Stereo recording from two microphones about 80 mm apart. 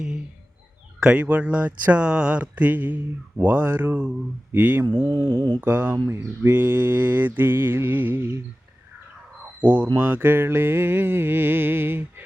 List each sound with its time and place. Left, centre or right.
0.9 s speech: centre
4.5 s mantra: right
4.9 s mantra: right
5.5 s mantra: right
9.6 s speech: centre
10.0 s mantra: right